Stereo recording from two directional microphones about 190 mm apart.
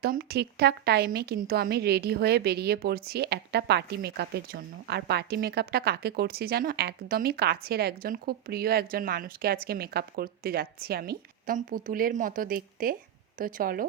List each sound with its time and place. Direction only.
0.0 s a woman's voice: 55° right (ahead or behind)